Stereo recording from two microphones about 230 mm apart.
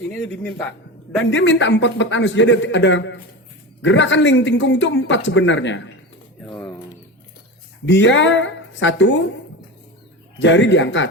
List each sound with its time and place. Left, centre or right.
0.1 s speech: centre
1.2 s speech: left
6.4 s pigeon: centre
7.9 s speech: left
10.4 s speech: left